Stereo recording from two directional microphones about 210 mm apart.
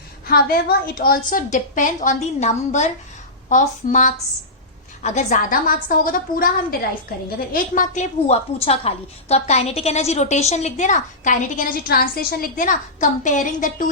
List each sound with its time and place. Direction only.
0.3 s a woman's voice: 45° left (ahead or behind)